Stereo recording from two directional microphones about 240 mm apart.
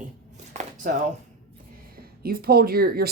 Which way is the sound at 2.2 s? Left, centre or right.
Right.